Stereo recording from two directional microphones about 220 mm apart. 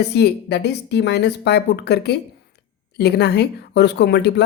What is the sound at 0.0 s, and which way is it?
A woman's voice, 50° left (ahead or behind).